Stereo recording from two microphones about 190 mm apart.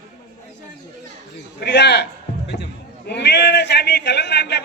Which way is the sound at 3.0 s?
65° left (ahead or behind).